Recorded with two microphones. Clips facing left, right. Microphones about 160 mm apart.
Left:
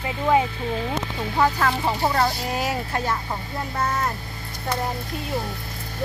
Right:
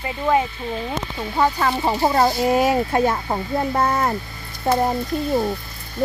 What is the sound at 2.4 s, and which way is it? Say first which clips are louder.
Speech: right 9 dB; 55° right (ahead or behind).